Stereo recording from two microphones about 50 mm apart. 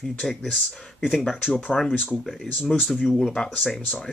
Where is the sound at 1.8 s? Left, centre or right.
Left.